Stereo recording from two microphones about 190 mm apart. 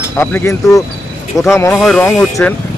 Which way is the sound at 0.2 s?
10° left (ahead or behind).